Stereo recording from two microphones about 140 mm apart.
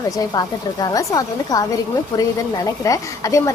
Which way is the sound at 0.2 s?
25° left (ahead or behind).